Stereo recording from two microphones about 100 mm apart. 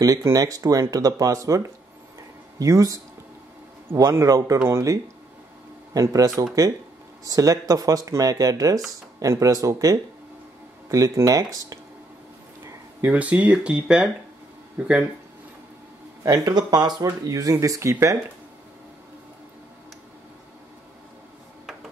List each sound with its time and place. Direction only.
0.0 s speech: 35° right (ahead or behind)
13.0 s speech: 15° right (ahead or behind)
16.3 s speech: 40° right (ahead or behind)